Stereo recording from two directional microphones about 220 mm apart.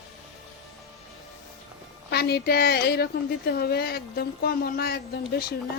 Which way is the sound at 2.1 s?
45° left (ahead or behind).